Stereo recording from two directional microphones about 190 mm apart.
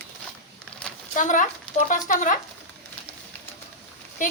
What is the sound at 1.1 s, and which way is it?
Speech, 40° left (ahead or behind).